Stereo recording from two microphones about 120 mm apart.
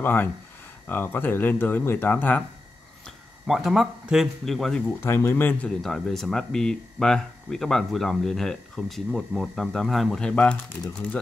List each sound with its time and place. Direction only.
0.0 s speech: 15° left (ahead or behind)
3.4 s speech: centre (ahead or behind)
5.0 s speech: 20° left (ahead or behind)
5.8 s speech: 5° left (ahead or behind)